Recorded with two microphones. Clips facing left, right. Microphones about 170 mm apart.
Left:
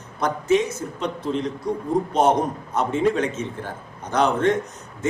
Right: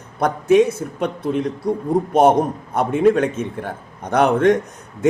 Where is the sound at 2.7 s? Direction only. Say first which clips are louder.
Right 5 dB; 60° right (ahead or behind).